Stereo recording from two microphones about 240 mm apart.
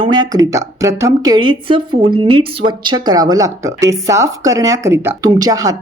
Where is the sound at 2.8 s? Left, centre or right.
Centre.